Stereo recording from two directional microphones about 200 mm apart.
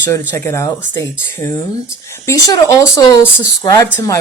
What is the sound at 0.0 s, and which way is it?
A woman's voice, 10° left (ahead or behind).